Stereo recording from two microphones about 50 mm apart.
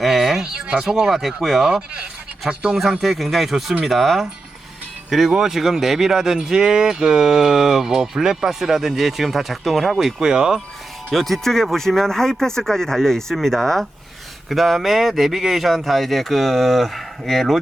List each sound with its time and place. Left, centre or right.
0.0 s a sound: centre
0.5 s speech: centre
2.5 s speech: right
3.0 s speech: centre
5.3 s speech: centre
10.2 s speech: centre
11.1 s speech: centre